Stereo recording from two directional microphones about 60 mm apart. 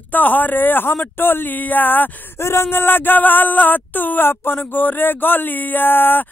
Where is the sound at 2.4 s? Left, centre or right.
Left.